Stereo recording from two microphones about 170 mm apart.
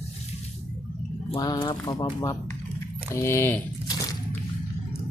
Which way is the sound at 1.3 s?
25° left (ahead or behind).